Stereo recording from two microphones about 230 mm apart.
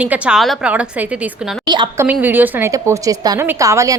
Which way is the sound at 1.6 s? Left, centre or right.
Centre.